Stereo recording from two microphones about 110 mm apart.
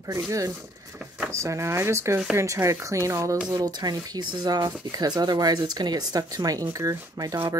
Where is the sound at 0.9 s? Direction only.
10° right (ahead or behind).